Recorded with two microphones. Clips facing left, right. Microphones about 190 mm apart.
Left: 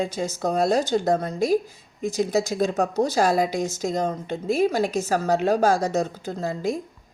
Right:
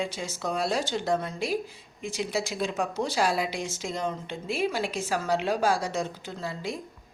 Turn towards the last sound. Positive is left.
turn(degrees=45)  # may be behind; listen again after turning